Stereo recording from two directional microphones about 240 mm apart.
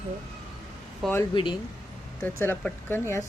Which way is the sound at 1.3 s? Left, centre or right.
Centre.